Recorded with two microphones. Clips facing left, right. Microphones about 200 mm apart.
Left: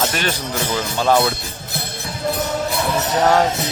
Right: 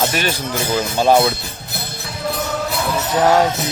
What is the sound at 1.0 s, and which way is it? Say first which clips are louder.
Speech: right 3 dB; 20° right (ahead or behind).